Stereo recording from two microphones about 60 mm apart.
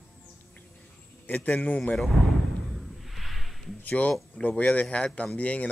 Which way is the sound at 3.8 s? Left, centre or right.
Left.